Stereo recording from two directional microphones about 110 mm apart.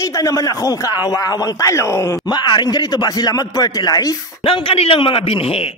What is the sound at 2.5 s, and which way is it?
Speech, 40° left (ahead or behind).